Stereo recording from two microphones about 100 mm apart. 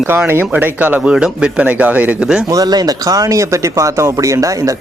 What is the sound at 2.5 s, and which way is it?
Speech, 40° right (ahead or behind).